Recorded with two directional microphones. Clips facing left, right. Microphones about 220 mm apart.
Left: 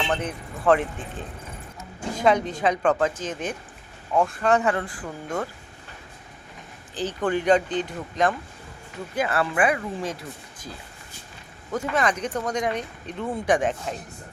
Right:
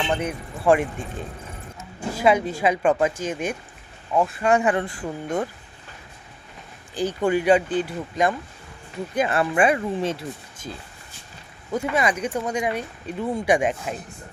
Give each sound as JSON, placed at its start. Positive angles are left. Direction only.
{"t": 0.1, "sound": "speech", "side_deg": -10}
{"t": 2.1, "sound": "speech", "side_deg": -5}
{"t": 6.9, "sound": "speech", "side_deg": -10}
{"t": 9.1, "sound": "speech", "side_deg": -20}
{"t": 11.7, "sound": "speech", "side_deg": -10}